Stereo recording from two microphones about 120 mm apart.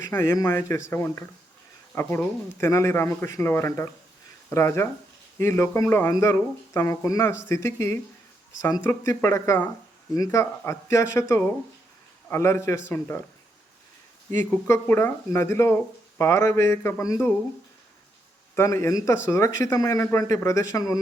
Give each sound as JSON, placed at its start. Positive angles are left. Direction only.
{"t": 0.1, "sound": "speech", "side_deg": 25}
{"t": 14.7, "sound": "speech", "side_deg": 15}
{"t": 18.5, "sound": "speech", "side_deg": 20}